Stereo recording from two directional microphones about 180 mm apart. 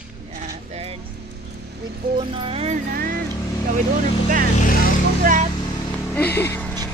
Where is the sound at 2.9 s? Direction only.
55° right (ahead or behind).